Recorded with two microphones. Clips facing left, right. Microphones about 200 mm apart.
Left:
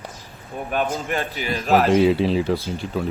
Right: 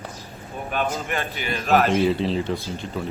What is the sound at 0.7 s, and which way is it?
A man's voice, 40° left (ahead or behind).